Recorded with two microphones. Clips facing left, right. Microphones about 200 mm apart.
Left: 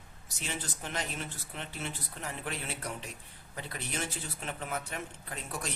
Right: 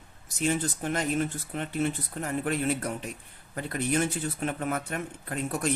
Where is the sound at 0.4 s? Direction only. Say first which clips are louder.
Right 12 dB; 45° right (ahead or behind).